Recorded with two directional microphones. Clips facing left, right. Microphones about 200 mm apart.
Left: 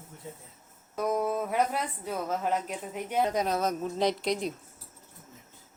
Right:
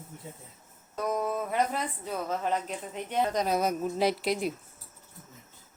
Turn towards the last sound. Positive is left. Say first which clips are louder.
# right 1 dB
turn(degrees=-5)  # may be behind; listen again after turning